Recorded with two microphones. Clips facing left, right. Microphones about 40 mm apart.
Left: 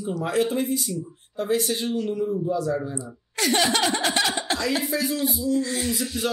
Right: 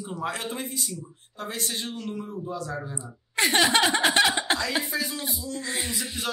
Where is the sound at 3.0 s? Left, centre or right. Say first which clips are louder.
Right 2 dB; right.